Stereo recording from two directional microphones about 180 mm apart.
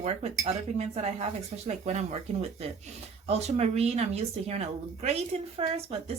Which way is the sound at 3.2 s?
35° right (ahead or behind).